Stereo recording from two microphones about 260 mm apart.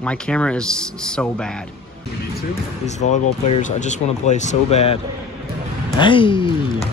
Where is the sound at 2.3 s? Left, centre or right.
Left.